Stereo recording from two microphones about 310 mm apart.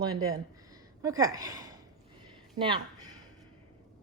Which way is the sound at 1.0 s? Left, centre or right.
Centre.